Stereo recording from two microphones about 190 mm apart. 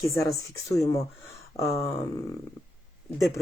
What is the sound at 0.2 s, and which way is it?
Speech, 15° left (ahead or behind).